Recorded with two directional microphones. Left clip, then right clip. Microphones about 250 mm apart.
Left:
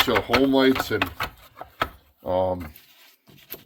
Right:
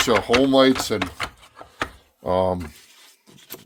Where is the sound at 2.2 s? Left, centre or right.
Right.